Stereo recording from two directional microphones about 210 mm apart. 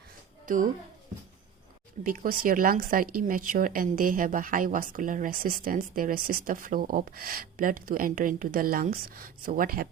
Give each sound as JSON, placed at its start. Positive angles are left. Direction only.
{"t": 0.4, "sound": "speech", "side_deg": -40}
{"t": 2.0, "sound": "speech", "side_deg": -40}